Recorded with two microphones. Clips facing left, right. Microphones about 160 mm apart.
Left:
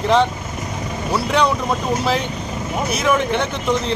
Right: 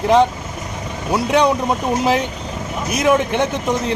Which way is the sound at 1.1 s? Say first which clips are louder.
Right 3 dB; 15° right (ahead or behind).